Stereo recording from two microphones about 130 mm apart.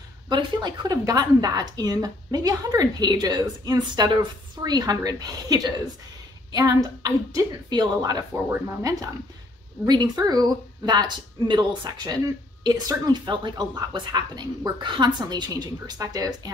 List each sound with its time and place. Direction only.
0.3 s a woman's voice: 35° right (ahead or behind)